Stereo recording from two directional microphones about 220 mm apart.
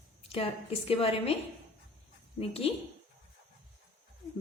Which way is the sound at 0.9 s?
25° left (ahead or behind).